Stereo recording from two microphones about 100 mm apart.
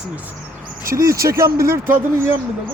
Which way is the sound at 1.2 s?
30° right (ahead or behind).